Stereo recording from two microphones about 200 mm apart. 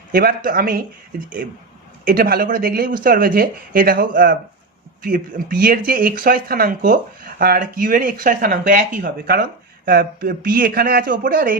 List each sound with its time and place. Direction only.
0.1 s speech: 45° right (ahead or behind)
2.0 s speech: 45° right (ahead or behind)